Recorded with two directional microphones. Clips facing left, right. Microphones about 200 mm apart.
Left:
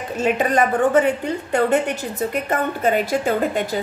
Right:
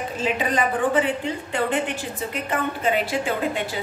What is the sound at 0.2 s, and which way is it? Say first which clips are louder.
A woman's voice: left 5 dB; 45° left (ahead or behind).